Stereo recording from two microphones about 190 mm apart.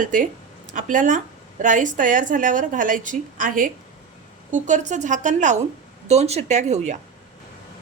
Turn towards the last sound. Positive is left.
turn(degrees=-35)  # may be behind; listen again after turning